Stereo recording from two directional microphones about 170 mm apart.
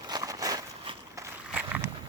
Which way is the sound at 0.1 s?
20° right (ahead or behind).